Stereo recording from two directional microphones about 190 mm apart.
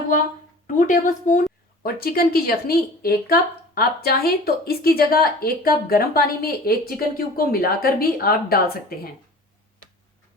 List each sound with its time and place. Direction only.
0.8 s speech: 45° left (ahead or behind)
1.8 s a woman's voice: 50° left (ahead or behind)